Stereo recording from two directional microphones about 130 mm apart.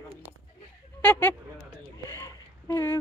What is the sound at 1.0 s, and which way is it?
Speech, 10° left (ahead or behind).